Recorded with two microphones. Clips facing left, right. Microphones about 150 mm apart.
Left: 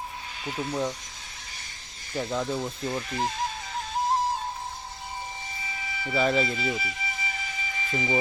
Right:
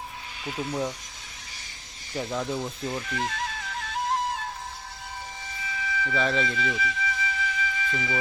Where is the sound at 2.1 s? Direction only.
Centre (ahead or behind).